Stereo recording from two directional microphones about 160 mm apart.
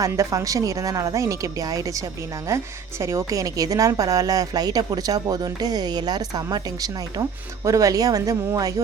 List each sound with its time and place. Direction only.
0.0 s a woman's voice: 20° right (ahead or behind)